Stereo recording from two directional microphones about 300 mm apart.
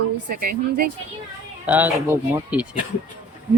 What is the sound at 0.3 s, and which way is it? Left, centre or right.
Speech, right.